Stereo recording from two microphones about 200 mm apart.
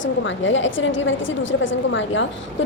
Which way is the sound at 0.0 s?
70° left (ahead or behind).